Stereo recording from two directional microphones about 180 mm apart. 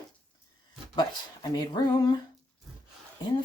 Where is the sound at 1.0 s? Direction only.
20° left (ahead or behind).